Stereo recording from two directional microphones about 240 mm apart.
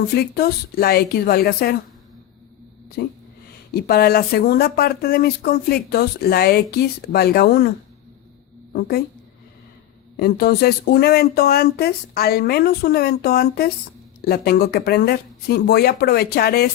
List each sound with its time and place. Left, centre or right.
0.2 s speech: left
3.0 s speech: left
10.2 s speech: left